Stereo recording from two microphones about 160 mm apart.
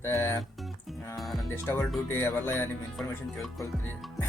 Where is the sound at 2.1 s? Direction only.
15° left (ahead or behind).